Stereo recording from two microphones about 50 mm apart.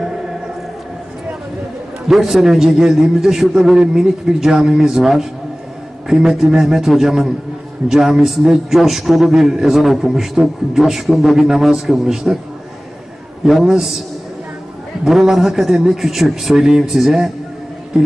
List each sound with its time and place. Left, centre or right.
2.0 s a man's voice: centre
13.4 s a man's voice: centre
15.0 s a man's voice: centre
17.9 s music: centre